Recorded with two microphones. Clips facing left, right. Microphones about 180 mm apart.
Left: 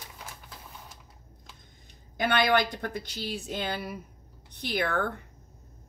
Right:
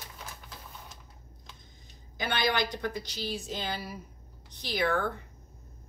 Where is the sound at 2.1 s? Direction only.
55° left (ahead or behind).